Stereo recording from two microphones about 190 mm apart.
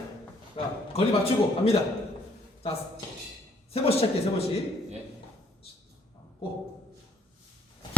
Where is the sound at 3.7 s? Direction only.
30° left (ahead or behind).